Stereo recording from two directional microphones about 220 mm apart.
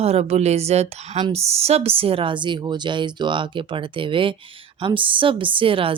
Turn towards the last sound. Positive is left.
turn(degrees=-25)  # may be behind; listen again after turning